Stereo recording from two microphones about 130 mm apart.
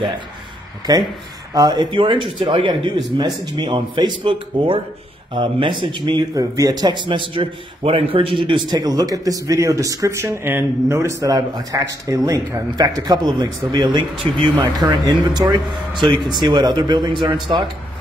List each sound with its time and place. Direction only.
0.9 s speech: 30° right (ahead or behind)
6.0 s a man's voice: 30° right (ahead or behind)